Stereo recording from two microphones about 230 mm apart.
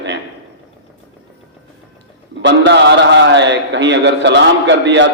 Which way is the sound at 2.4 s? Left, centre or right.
Right.